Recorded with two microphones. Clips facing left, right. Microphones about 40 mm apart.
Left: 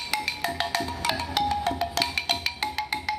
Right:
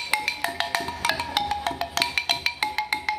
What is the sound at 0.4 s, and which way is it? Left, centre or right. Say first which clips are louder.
Music: right 1 dB; centre.